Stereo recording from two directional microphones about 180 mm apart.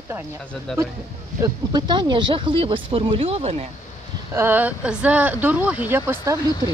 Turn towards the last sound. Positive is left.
turn(degrees=-15)  # may be behind; listen again after turning